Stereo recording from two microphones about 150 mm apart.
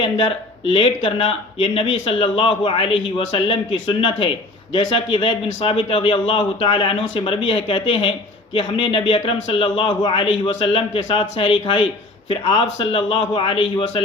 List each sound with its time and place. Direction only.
0.0 s a man's voice: 35° left (ahead or behind)